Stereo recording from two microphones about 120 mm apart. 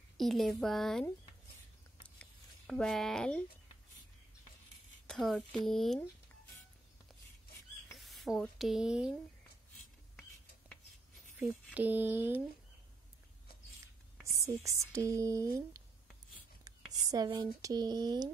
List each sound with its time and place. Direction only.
0.2 s speech: centre (ahead or behind)
2.0 s a sound: 10° left (ahead or behind)
5.0 s speech: 5° left (ahead or behind)
8.0 s speech: centre (ahead or behind)
11.7 s a sound: 15° right (ahead or behind)
14.2 s speech: 25° right (ahead or behind)
16.6 s whispering: 30° right (ahead or behind)
17.4 s speech: 30° right (ahead or behind)